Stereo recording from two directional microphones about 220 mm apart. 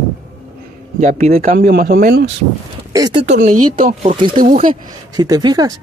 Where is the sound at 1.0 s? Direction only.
40° right (ahead or behind).